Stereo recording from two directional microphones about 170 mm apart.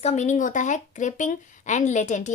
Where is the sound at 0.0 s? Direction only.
40° left (ahead or behind).